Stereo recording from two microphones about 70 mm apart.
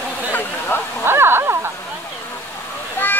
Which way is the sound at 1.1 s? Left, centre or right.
Right.